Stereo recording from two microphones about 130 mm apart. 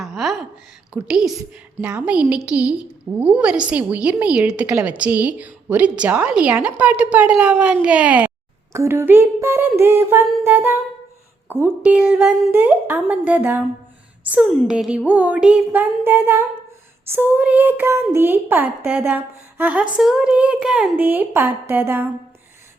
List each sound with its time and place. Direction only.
0.0 s a sound: centre (ahead or behind)
0.9 s a woman's voice: 5° right (ahead or behind)
12.5 s a woman's voice: 15° right (ahead or behind)